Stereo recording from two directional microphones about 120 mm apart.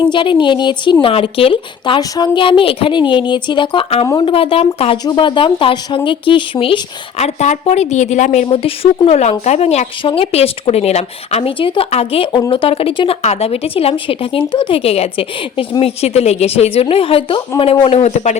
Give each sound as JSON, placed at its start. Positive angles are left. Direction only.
{"t": 0.1, "sound": "a woman's voice", "side_deg": 40}
{"t": 2.0, "sound": "a woman's voice", "side_deg": 35}
{"t": 5.0, "sound": "a woman's voice", "side_deg": 40}
{"t": 7.2, "sound": "speech", "side_deg": 80}
{"t": 8.4, "sound": "a woman's voice", "side_deg": 50}
{"t": 11.5, "sound": "a woman's voice", "side_deg": 45}
{"t": 13.2, "sound": "a woman's voice", "side_deg": 60}